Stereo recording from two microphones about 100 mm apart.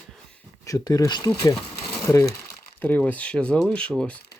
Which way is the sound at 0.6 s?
35° left (ahead or behind).